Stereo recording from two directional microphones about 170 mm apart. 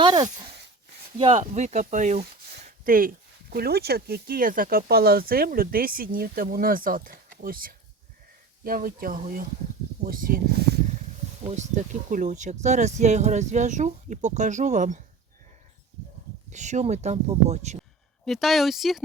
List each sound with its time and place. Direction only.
0.0 s a sound: 25° right (ahead or behind)
1.2 s speech: 40° right (ahead or behind); by 10.4 s 55° right (ahead or behind)
11.4 s speech: 45° right (ahead or behind)
16.5 s speech: 45° right (ahead or behind)
18.3 s speech: centre (ahead or behind)